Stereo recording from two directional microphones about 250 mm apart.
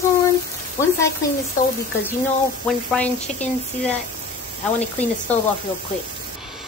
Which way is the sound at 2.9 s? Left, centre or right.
Centre.